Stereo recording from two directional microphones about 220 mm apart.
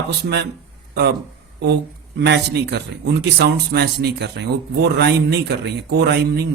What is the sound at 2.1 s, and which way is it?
Speech, 50° right (ahead or behind).